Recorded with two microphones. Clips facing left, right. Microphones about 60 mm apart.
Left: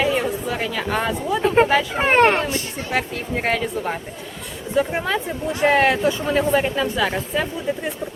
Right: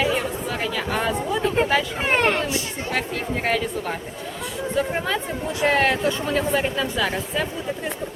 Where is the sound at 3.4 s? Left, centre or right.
Centre.